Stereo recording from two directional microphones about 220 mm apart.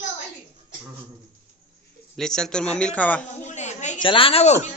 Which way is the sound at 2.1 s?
Centre (ahead or behind).